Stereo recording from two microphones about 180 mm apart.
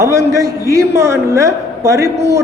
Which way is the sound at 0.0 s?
15° right (ahead or behind).